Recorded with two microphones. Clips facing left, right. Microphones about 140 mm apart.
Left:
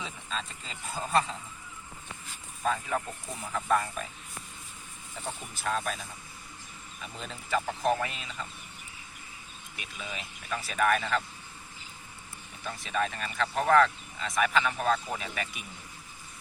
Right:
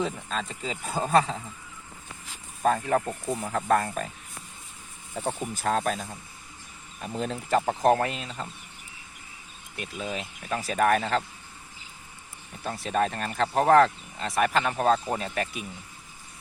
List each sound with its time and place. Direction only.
0.0 s speech: 50° right (ahead or behind)
2.6 s speech: 50° right (ahead or behind)
3.2 s speech: 40° right (ahead or behind)
3.5 s speech: 55° right (ahead or behind)
5.1 s speech: 55° right (ahead or behind); by 8.4 s 40° right (ahead or behind)
9.7 s speech: 40° right (ahead or behind)
12.6 s speech: 40° right (ahead or behind)